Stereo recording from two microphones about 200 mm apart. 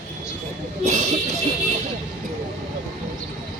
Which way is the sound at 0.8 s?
35° right (ahead or behind).